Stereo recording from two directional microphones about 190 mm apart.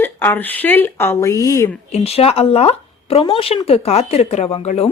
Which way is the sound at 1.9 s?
30° left (ahead or behind).